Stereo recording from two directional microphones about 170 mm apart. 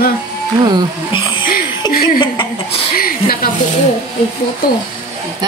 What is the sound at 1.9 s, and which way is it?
Speech, 60° left (ahead or behind).